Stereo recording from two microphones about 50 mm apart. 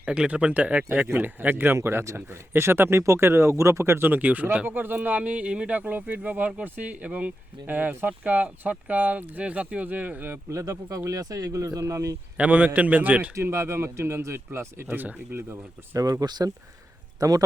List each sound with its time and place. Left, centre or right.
0.3 s speech: right
1.2 s speech: right
3.0 s speech: right
4.0 s speech: right
10.5 s speech: right
12.4 s speech: right
13.3 s speech: right
14.9 s speech: right
15.4 s speech: right